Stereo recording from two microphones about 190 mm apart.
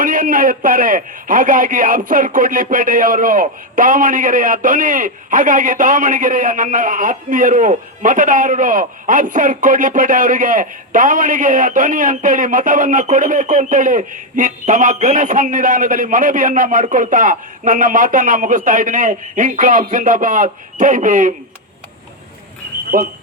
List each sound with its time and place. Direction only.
0.0 s a man's voice: 45° right (ahead or behind)
22.9 s a man's voice: 50° right (ahead or behind)